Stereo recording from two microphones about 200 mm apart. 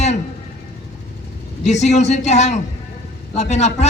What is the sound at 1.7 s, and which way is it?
A man's voice, 35° left (ahead or behind).